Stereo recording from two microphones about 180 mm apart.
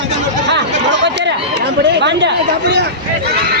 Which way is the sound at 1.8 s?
75° right (ahead or behind).